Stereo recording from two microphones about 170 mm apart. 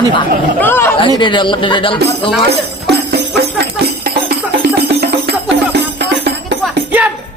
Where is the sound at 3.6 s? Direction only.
65° right (ahead or behind).